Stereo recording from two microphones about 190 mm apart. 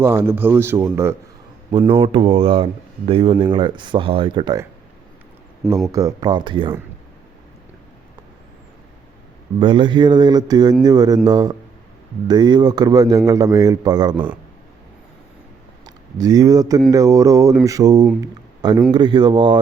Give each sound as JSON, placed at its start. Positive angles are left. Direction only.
{"t": 0.0, "sound": "a sound", "side_deg": -15}
{"t": 1.9, "sound": "speech", "side_deg": -25}
{"t": 5.9, "sound": "speech", "side_deg": -15}
{"t": 9.6, "sound": "speech", "side_deg": -25}
{"t": 15.8, "sound": "speech", "side_deg": -20}
{"t": 16.9, "sound": "a sound", "side_deg": -15}
{"t": 18.9, "sound": "speech", "side_deg": -25}